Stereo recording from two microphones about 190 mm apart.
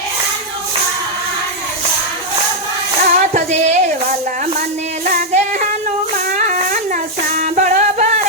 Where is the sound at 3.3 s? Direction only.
40° right (ahead or behind).